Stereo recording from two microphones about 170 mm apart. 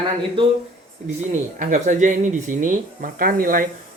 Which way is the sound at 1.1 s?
50° right (ahead or behind).